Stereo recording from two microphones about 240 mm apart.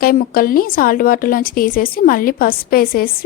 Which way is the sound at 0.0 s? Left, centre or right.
Left.